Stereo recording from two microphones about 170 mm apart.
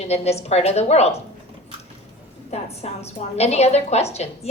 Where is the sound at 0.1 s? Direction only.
40° left (ahead or behind).